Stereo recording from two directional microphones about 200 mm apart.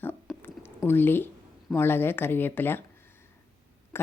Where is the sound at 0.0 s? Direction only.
10° left (ahead or behind).